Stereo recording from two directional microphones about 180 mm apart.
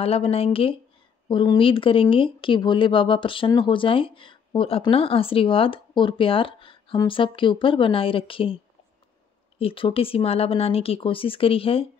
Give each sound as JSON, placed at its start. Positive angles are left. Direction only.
{"t": 0.0, "sound": "speech", "side_deg": 35}
{"t": 9.6, "sound": "speech", "side_deg": 30}